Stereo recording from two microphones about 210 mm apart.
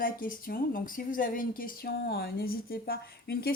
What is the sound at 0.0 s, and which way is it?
A woman's voice, 40° left (ahead or behind).